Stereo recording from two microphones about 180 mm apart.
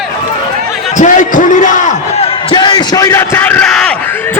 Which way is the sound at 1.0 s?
45° left (ahead or behind).